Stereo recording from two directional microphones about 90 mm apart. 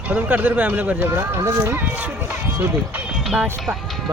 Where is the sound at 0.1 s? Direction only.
20° right (ahead or behind).